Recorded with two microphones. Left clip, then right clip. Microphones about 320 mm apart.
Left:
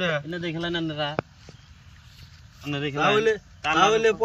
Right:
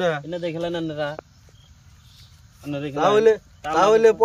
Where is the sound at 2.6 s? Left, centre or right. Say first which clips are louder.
Even; centre.